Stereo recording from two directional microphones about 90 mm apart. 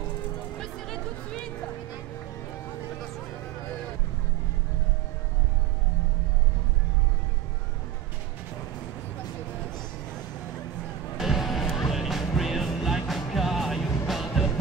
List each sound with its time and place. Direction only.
0.6 s music: 5° left (ahead or behind)
11.1 s music: centre (ahead or behind)